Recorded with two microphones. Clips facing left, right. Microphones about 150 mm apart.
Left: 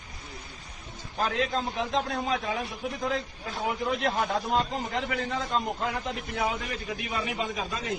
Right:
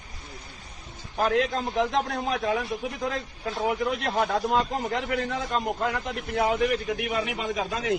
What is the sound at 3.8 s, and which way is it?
Speech, 75° right (ahead or behind).